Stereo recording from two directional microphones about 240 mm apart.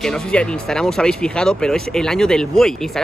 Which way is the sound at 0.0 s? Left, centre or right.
Centre.